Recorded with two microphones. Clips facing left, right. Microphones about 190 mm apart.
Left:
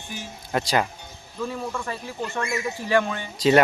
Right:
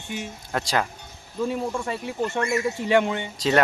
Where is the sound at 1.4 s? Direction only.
20° right (ahead or behind).